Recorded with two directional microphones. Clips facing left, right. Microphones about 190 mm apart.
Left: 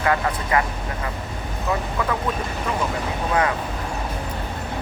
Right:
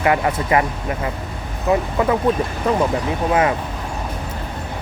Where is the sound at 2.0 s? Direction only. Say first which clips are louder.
Right 6 dB; 25° right (ahead or behind).